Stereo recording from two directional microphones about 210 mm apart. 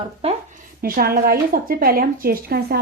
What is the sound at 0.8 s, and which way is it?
A woman's voice, 45° right (ahead or behind).